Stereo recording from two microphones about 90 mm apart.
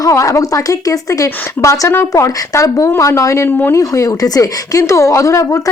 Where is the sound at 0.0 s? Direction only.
35° left (ahead or behind).